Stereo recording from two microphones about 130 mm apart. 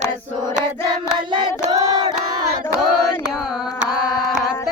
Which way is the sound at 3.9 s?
5° right (ahead or behind).